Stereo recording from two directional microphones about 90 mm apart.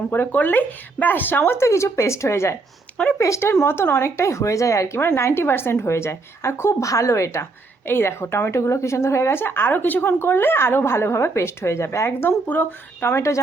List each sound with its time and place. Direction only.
0.1 s speech: 20° left (ahead or behind)